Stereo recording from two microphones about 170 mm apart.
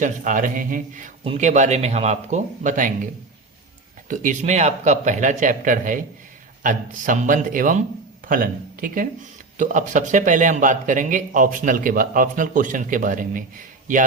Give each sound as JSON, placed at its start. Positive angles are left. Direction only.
{"t": 0.0, "sound": "a man's voice", "side_deg": -50}
{"t": 1.2, "sound": "a man's voice", "side_deg": -40}
{"t": 4.1, "sound": "a man's voice", "side_deg": -50}